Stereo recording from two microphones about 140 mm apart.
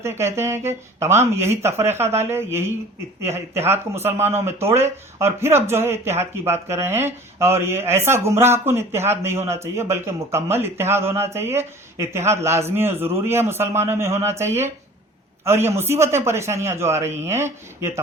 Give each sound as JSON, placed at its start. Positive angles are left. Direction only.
{"t": 0.0, "sound": "speech", "side_deg": -20}